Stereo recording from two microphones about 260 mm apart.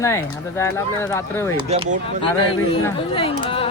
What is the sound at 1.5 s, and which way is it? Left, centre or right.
Speech, right.